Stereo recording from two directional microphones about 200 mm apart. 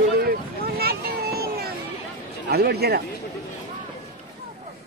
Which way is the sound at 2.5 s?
55° right (ahead or behind).